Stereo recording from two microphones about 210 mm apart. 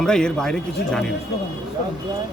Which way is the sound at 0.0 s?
5° left (ahead or behind).